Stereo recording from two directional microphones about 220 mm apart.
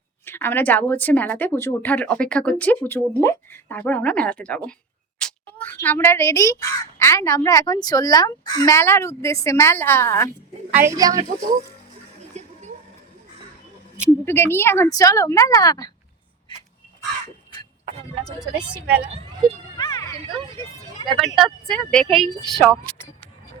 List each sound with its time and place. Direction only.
0.3 s speech: 10° left (ahead or behind)
10.8 s a woman's voice: 15° right (ahead or behind)
12.3 s a sound: 30° right (ahead or behind)
14.3 s speech: 10° left (ahead or behind)
19.7 s children playing: 15° left (ahead or behind)
20.6 s vehicle: 20° left (ahead or behind)
21.3 s speech: centre (ahead or behind)